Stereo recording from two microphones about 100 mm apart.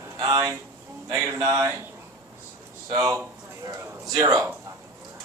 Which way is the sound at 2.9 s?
35° right (ahead or behind).